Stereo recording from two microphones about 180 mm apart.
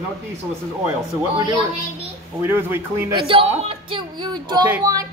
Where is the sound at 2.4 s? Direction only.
10° right (ahead or behind).